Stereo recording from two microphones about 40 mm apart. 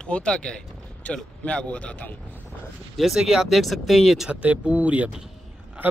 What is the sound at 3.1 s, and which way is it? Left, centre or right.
Speech, centre.